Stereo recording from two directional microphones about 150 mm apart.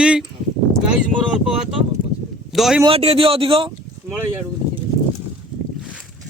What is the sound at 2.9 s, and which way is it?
Speech, 40° right (ahead or behind).